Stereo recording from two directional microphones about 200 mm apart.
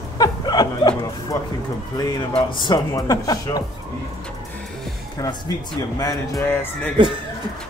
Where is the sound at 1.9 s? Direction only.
20° left (ahead or behind).